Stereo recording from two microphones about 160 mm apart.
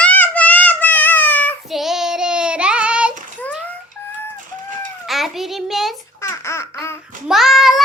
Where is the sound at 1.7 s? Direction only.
Centre (ahead or behind).